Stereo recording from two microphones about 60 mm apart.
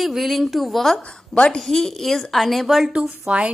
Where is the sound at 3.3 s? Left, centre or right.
Centre.